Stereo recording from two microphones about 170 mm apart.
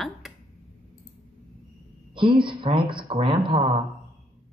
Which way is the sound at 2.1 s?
30° right (ahead or behind).